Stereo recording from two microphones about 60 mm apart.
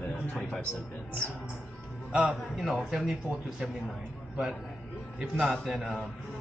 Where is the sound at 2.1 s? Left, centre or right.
Centre.